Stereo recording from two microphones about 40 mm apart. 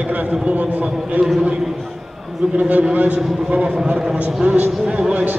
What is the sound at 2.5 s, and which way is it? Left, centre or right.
Speech, right.